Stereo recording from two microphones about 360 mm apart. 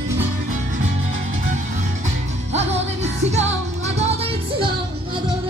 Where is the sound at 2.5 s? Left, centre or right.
Centre.